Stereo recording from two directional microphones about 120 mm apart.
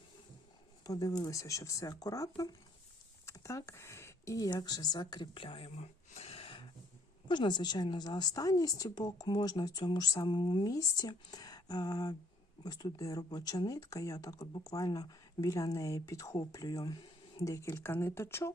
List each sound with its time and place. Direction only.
0.9 s speech: 30° left (ahead or behind); by 6.7 s 50° left (ahead or behind)
7.3 s a woman's voice: 40° left (ahead or behind); by 18.5 s 20° left (ahead or behind)